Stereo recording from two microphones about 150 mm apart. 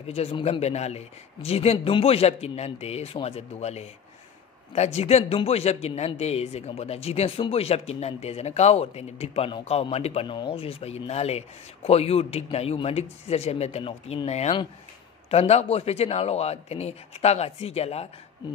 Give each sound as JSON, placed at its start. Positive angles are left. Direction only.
{"t": 0.0, "sound": "speech", "side_deg": 40}